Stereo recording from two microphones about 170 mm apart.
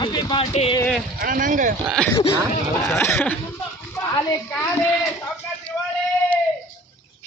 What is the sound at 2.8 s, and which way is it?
A woman's voice, 15° left (ahead or behind).